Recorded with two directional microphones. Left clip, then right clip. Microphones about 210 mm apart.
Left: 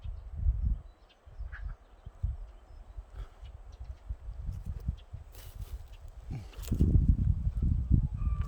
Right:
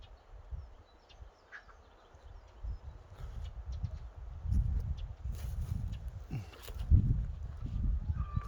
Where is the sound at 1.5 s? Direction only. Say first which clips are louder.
Even; 55° right (ahead or behind).